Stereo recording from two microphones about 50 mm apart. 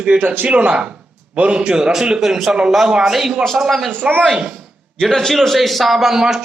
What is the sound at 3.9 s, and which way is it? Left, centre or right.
Speech, right.